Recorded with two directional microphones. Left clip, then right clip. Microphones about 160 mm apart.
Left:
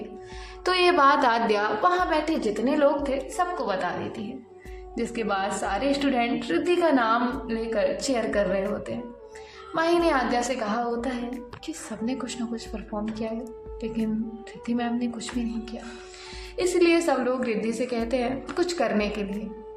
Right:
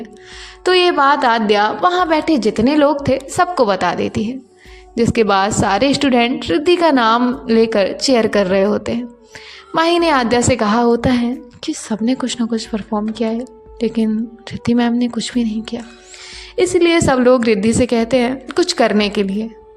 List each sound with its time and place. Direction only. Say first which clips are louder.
0.6 s a woman's voice: right 7 dB; 30° right (ahead or behind); by 3.9 s 55° right (ahead or behind)
4.9 s a woman's voice: right 14 dB; 50° right (ahead or behind); by 17.0 s 30° right (ahead or behind)
17.1 s a woman's voice: right 13 dB; 45° right (ahead or behind)